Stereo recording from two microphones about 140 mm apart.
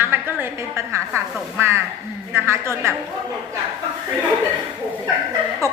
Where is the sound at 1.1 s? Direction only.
15° right (ahead or behind).